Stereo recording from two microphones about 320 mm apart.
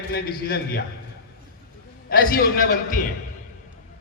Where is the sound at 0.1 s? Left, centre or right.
Left.